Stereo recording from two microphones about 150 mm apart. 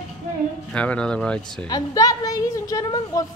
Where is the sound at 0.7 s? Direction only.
10° left (ahead or behind).